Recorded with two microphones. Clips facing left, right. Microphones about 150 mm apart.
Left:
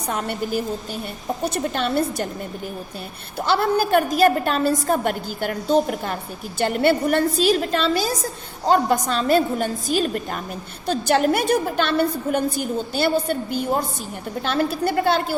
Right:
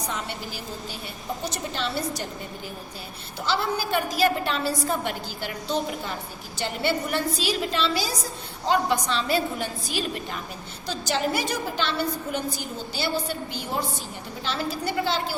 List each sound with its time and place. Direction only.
0.1 s a woman's voice: 55° left (ahead or behind)
3.3 s a woman's voice: 55° left (ahead or behind)